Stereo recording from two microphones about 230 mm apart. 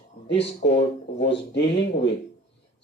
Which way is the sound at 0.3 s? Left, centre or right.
Left.